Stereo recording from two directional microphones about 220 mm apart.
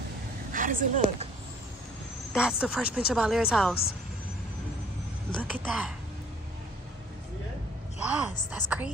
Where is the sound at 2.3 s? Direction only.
5° right (ahead or behind).